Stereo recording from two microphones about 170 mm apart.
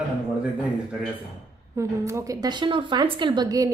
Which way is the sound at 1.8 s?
15° right (ahead or behind).